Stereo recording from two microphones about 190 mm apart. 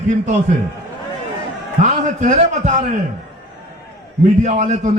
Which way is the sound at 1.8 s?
40° right (ahead or behind).